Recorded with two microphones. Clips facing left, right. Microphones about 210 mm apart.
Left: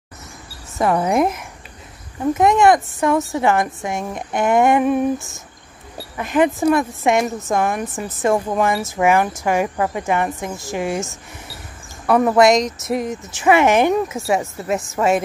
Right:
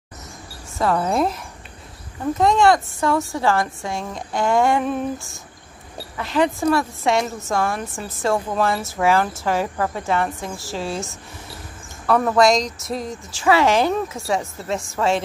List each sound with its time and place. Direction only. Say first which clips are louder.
0.7 s a woman's voice: left 3 dB; 15° left (ahead or behind)
12.3 s a woman's voice: left 3 dB; 20° left (ahead or behind)
14.3 s a woman's voice: left 3 dB; 5° left (ahead or behind)